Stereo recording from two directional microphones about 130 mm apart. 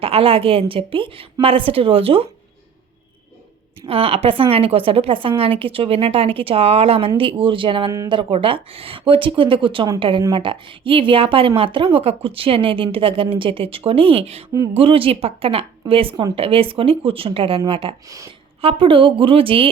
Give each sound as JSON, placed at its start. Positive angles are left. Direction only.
{"t": 0.0, "sound": "a woman's voice", "side_deg": -45}
{"t": 3.8, "sound": "a woman's voice", "side_deg": -45}
{"t": 8.3, "sound": "a woman's voice", "side_deg": -45}